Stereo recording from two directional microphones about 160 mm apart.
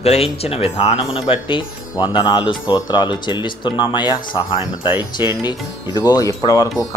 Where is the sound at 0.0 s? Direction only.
40° left (ahead or behind).